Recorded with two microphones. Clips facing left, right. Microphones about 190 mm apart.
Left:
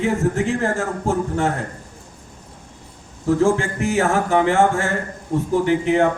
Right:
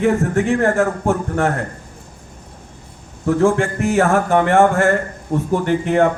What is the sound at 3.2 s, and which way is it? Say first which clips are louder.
A man's voice: right 2 dB; 60° right (ahead or behind).